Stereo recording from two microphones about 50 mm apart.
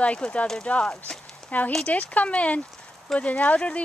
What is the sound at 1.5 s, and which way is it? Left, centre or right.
Speech, left.